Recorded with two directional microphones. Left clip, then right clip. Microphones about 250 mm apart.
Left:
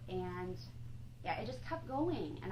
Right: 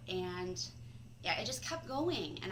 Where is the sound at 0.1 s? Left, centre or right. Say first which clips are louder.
Right 3 dB; right.